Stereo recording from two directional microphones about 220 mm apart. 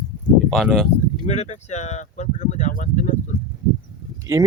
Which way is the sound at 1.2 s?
30° left (ahead or behind).